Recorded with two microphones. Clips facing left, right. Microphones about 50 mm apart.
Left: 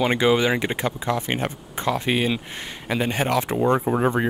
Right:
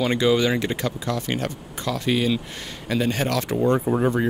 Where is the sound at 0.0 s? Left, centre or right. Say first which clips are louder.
Left 1 dB; left.